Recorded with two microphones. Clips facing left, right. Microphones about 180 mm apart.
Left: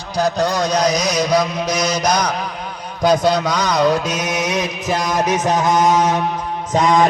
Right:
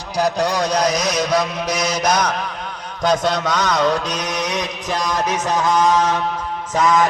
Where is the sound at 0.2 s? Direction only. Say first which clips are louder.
Left 1 dB; 10° right (ahead or behind).